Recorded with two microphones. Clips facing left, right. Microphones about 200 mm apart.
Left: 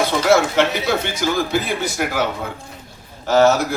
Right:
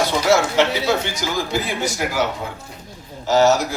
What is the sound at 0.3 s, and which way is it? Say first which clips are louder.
A man's voice: left 1 dB; 55° left (ahead or behind).